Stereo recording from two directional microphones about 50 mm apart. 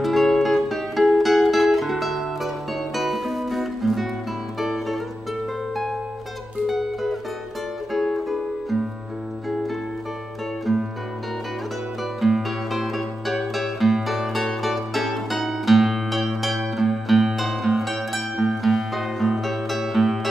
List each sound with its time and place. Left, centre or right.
0.0 s music: centre
6.7 s music: centre
10.6 s music: centre
12.2 s music: centre